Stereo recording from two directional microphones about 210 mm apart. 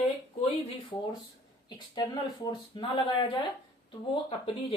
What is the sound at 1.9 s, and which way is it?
Speech, 20° left (ahead or behind).